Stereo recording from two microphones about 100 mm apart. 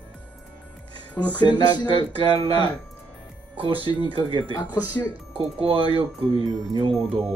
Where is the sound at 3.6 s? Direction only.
60° right (ahead or behind).